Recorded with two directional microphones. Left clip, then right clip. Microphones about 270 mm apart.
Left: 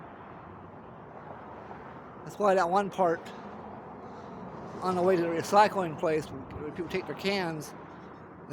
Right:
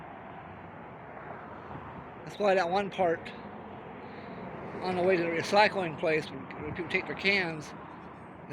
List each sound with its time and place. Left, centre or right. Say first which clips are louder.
2.4 s speech: left 2 dB; centre
4.8 s speech: left 1 dB; centre